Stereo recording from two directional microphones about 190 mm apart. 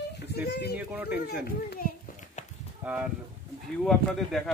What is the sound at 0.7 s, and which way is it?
Speech, 10° right (ahead or behind).